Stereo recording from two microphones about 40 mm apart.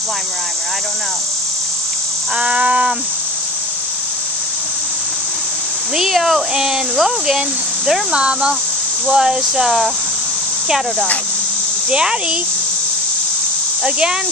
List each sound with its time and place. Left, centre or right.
2.3 s a sound: right
5.9 s speech: centre
8.2 s speech: right
11.9 s speech: centre
13.8 s speech: right